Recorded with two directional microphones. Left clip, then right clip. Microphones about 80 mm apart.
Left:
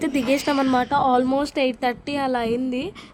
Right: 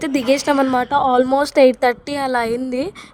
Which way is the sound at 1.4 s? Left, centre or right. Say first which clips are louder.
Right 9 dB; right.